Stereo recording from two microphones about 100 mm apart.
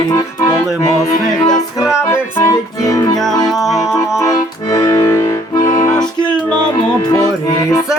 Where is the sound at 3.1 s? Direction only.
5° left (ahead or behind).